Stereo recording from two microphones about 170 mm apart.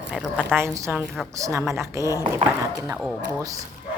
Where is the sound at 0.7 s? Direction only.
15° right (ahead or behind).